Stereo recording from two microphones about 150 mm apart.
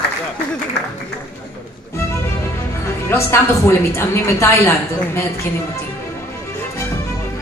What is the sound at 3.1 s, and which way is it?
A woman's voice, 15° left (ahead or behind).